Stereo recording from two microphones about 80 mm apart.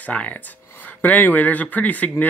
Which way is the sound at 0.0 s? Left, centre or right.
Centre.